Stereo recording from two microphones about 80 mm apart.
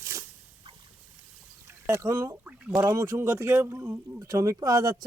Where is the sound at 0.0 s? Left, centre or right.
Right.